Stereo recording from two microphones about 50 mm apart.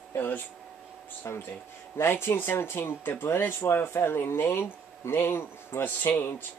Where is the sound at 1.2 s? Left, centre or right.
Left.